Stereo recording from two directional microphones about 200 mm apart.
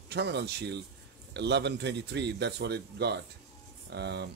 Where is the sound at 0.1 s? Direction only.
55° right (ahead or behind).